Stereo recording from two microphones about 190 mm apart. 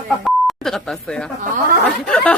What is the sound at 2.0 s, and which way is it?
Chatter, 5° left (ahead or behind).